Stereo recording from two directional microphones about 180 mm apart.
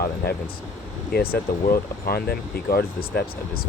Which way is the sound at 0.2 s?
60° left (ahead or behind).